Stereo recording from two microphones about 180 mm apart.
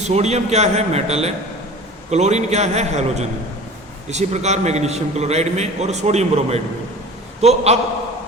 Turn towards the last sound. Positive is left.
turn(degrees=-35)  # may be behind; listen again after turning